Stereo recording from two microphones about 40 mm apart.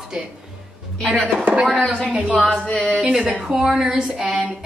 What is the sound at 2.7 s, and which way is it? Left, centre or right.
Speech, left.